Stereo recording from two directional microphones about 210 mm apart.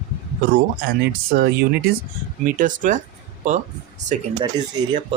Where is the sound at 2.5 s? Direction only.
40° right (ahead or behind).